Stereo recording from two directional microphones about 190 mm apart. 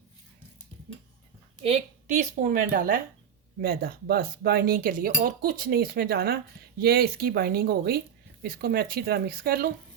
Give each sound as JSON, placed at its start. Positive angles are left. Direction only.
{"t": 1.6, "sound": "a woman's voice", "side_deg": -35}